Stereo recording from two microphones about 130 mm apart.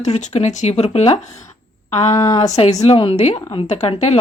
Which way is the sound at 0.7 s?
50° left (ahead or behind).